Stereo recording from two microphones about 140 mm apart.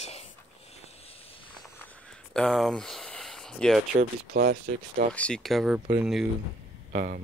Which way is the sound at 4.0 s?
90° right.